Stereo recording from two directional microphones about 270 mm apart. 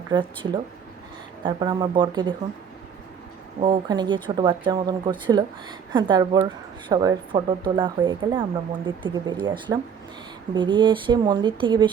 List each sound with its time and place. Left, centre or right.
0.1 s a woman's voice: centre
3.6 s a woman's voice: centre